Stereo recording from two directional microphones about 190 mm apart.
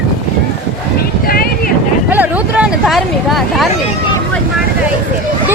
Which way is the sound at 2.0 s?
10° right (ahead or behind).